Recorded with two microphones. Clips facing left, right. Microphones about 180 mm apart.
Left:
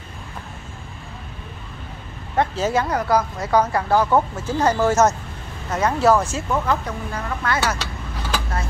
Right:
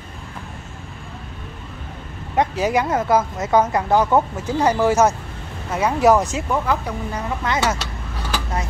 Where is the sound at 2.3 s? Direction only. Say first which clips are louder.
Right 1 dB; 15° right (ahead or behind).